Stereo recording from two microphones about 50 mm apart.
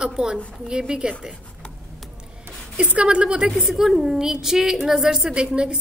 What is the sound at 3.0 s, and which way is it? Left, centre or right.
A woman's voice, right.